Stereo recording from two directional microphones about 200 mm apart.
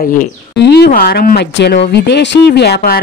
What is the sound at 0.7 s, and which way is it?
Speech, 55° left (ahead or behind).